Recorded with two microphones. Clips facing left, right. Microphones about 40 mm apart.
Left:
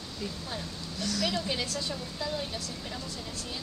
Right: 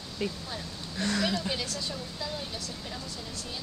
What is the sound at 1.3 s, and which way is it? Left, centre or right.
Speech, centre.